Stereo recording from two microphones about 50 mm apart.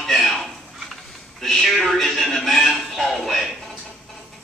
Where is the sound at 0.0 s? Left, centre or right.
Centre.